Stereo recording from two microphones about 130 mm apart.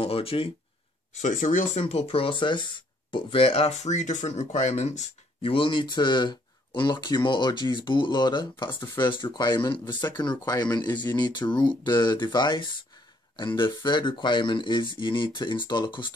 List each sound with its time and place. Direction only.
0.0 s speech: 45° left (ahead or behind)
1.1 s speech: 80° left
1.8 s speech: 55° left (ahead or behind)
5.5 s speech: 40° left (ahead or behind)